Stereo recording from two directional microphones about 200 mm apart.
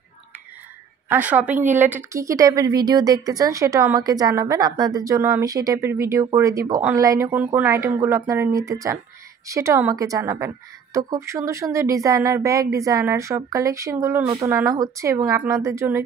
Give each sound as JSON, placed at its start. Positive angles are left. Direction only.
{"t": 1.0, "sound": "a woman's voice", "side_deg": -10}